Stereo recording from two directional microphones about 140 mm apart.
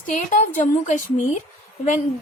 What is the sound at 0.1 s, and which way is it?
A woman's voice, 60° left (ahead or behind).